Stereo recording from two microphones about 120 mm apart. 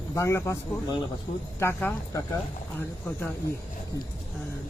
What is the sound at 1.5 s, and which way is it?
Speech, 20° left (ahead or behind).